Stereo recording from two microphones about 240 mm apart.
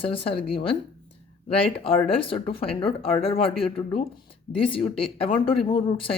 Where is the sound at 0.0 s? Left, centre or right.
Left.